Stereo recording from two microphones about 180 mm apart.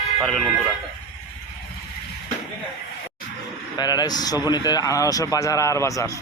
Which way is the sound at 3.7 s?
20° left (ahead or behind).